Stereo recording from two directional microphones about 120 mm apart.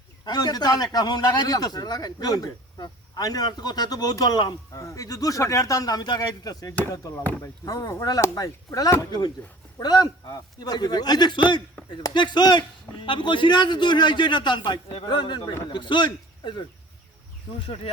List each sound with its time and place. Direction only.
0.3 s a man's voice: 35° left (ahead or behind)